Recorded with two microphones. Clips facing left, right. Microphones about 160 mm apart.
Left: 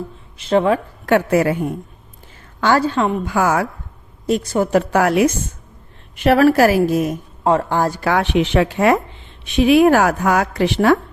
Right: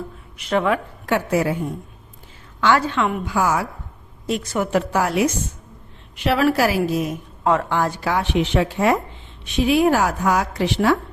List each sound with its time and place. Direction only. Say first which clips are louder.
0.3 s speech: left 4 dB; 30° left (ahead or behind)
1.0 s a woman's voice: left 5 dB; 60° left (ahead or behind)
2.6 s a woman's voice: left 2 dB; 40° left (ahead or behind)
3.2 s a woman's voice: left 3 dB; 60° left (ahead or behind)
4.3 s a woman's voice: left 5 dB; 35° left (ahead or behind)
4.9 s a woman's voice: left 5 dB; 60° left (ahead or behind)
6.1 s a woman's voice: left 6 dB; 50° left (ahead or behind)
7.4 s a woman's voice: left 3 dB; 35° left (ahead or behind)
8.0 s a woman's voice: left 4 dB; 70° left (ahead or behind)